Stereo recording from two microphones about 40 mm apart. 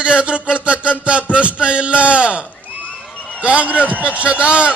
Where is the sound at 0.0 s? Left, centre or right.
Right.